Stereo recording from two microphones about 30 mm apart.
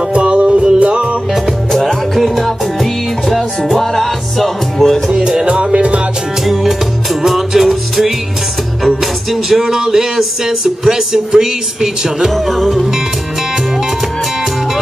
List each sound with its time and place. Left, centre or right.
0.2 s music: right
1.7 s music: centre
2.1 s music: centre
5.1 s music: right
5.5 s music: right
6.4 s music: centre
10.6 s speech: centre
12.4 s music: centre